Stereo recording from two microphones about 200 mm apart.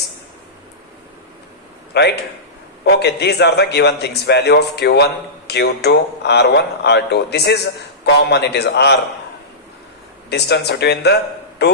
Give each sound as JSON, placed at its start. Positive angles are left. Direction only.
{"t": 1.9, "sound": "a man's voice", "side_deg": 55}
{"t": 10.2, "sound": "a man's voice", "side_deg": 55}